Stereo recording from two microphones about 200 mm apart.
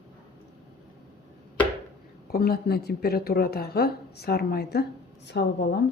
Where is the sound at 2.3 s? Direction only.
50° left (ahead or behind).